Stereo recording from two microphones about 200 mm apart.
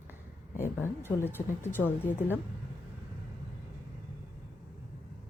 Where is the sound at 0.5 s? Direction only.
10° left (ahead or behind).